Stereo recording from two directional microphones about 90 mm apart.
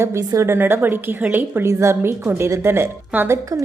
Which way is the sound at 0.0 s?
30° right (ahead or behind).